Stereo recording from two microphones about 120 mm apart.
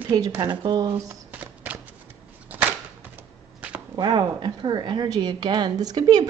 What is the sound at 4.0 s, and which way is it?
Speech, 40° right (ahead or behind).